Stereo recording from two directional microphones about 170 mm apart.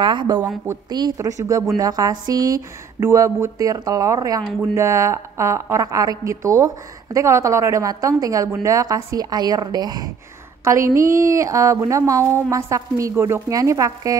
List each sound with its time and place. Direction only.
0.0 s a woman's voice: 30° right (ahead or behind)